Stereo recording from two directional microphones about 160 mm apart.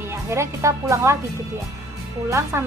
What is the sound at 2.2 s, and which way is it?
Speech, 20° right (ahead or behind).